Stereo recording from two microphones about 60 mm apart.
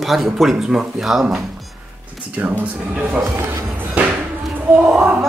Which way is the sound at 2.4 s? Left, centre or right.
Right.